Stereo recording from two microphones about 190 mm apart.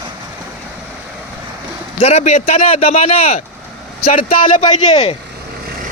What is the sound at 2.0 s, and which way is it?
Speech, 35° left (ahead or behind).